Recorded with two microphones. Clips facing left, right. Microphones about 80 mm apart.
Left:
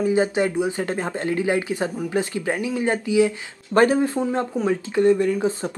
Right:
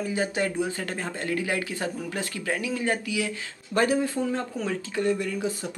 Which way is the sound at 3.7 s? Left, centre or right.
Left.